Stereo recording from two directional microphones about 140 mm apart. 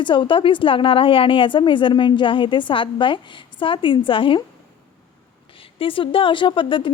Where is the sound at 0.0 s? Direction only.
35° left (ahead or behind).